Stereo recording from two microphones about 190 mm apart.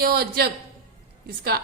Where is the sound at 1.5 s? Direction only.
55° right (ahead or behind).